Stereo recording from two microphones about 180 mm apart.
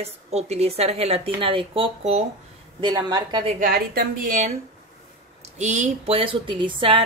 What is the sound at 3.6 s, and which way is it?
Speech, 55° right (ahead or behind).